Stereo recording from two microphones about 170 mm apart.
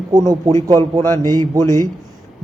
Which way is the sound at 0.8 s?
15° left (ahead or behind).